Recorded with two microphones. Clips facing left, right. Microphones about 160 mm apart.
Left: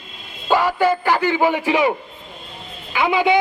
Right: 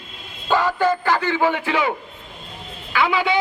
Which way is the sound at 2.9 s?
15° left (ahead or behind).